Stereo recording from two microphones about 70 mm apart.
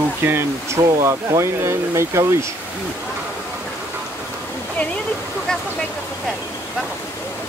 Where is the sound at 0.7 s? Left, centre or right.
Right.